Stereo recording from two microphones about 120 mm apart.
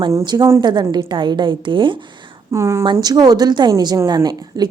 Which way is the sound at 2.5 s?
25° right (ahead or behind).